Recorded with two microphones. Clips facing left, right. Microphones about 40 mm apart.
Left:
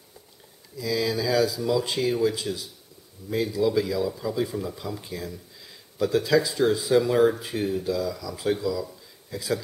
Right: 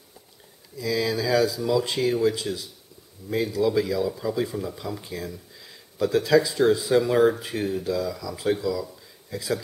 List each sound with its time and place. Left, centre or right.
0.7 s speech: centre
7.1 s speech: centre
8.8 s a sound: centre